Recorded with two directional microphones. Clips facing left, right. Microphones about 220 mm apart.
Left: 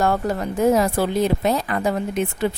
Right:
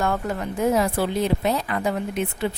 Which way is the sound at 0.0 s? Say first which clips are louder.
Left 4 dB; 35° left (ahead or behind).